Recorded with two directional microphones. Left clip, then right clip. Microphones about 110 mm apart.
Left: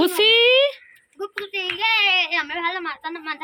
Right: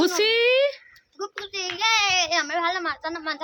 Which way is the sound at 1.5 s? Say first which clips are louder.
Left 2 dB; 35° right (ahead or behind).